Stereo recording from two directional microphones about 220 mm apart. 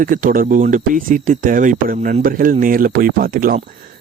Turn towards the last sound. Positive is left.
turn(degrees=-40)  # may be behind; listen again after turning